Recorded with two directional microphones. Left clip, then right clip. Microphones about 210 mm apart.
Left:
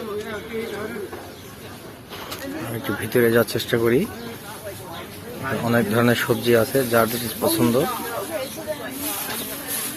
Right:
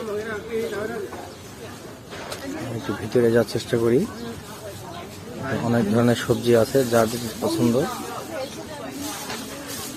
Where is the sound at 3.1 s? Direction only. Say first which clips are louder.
Left 1 dB; centre (ahead or behind).